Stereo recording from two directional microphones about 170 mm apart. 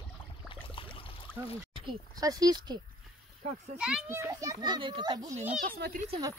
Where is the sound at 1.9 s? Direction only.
20° right (ahead or behind).